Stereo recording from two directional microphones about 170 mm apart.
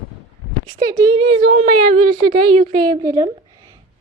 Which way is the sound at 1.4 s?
50° right (ahead or behind).